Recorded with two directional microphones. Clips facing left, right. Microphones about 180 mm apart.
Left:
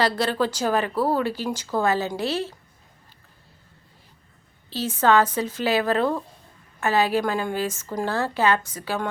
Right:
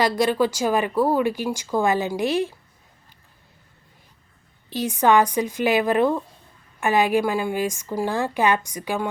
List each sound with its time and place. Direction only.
0.0 s speech: 10° right (ahead or behind)
4.7 s speech: 15° right (ahead or behind)